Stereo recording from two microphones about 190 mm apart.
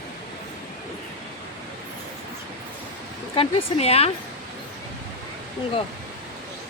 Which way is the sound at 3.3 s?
30° left (ahead or behind).